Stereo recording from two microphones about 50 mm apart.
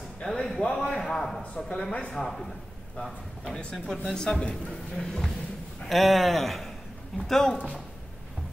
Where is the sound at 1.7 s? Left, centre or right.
Centre.